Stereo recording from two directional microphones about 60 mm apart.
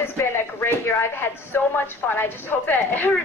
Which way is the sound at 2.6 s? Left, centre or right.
Left.